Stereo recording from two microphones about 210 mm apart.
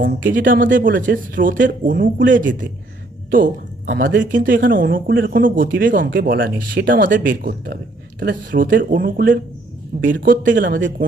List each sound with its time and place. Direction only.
0.0 s speech: 40° right (ahead or behind)
2.1 s speech: 60° right (ahead or behind)
2.4 s speech: 40° right (ahead or behind)
3.8 s speech: 50° right (ahead or behind)
4.3 s speech: 40° right (ahead or behind)